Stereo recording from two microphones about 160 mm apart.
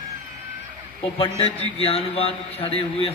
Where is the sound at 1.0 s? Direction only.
35° left (ahead or behind).